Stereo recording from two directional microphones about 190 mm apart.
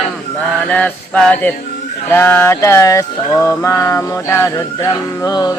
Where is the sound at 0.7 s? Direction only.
5° left (ahead or behind).